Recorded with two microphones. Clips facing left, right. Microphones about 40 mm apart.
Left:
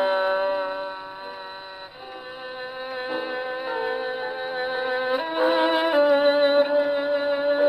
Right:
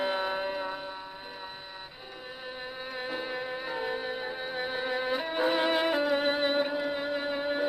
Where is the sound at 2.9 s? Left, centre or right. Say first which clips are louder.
Left 6 dB; centre.